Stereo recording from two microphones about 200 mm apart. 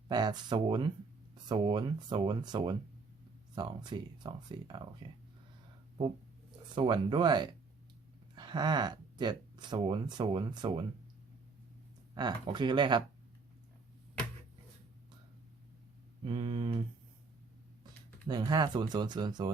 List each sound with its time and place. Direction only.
0.1 s speech: 20° right (ahead or behind)
6.7 s speech: 25° right (ahead or behind)
12.1 s speech: 20° right (ahead or behind)
16.2 s speech: 25° right (ahead or behind)
18.3 s speech: 20° right (ahead or behind)